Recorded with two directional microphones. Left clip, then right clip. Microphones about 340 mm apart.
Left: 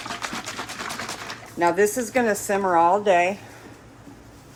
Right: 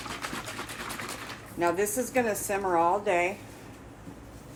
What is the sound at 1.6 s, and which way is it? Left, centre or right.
Speech, left.